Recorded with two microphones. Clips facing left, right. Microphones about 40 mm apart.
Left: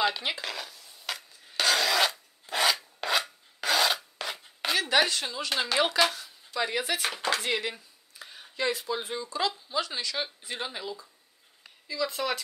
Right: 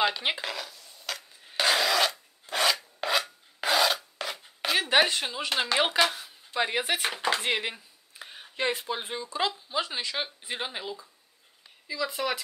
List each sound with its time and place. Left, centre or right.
0.4 s stir: centre
1.6 s filing: centre
1.9 s rub: centre
3.6 s filing: centre
4.7 s speech: right
11.9 s speech: centre